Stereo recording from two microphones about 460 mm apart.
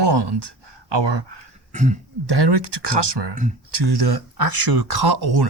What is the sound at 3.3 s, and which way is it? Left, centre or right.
Speech, centre.